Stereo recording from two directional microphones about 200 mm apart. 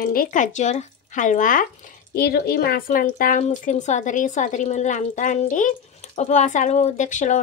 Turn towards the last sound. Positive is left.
turn(degrees=40)  # may be behind; listen again after turning